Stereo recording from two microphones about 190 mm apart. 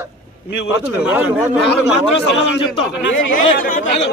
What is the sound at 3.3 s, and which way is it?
Speech, 45° left (ahead or behind).